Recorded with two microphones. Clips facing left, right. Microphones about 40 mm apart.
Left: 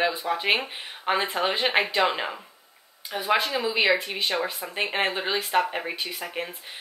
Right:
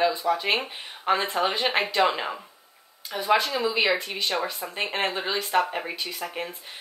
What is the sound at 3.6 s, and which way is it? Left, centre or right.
Speech, centre.